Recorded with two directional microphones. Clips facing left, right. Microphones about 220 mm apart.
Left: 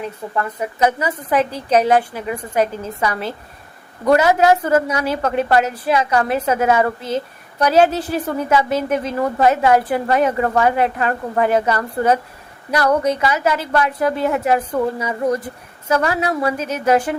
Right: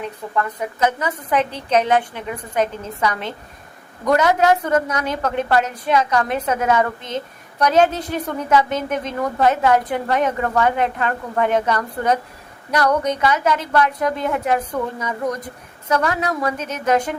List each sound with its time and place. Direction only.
0.0 s a woman's voice: 5° left (ahead or behind)
4.1 s a woman's voice: 5° left (ahead or behind)